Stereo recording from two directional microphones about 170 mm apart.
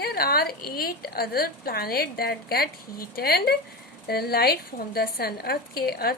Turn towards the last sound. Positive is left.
turn(degrees=65)  # may be behind; listen again after turning